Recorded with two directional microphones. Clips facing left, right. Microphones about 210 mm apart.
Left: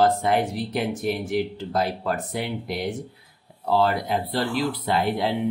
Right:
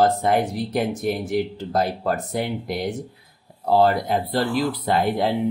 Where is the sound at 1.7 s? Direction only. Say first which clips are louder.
Right 4 dB; 45° right (ahead or behind).